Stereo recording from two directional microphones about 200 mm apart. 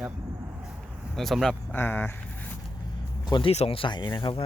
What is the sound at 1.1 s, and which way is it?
Speech, centre (ahead or behind).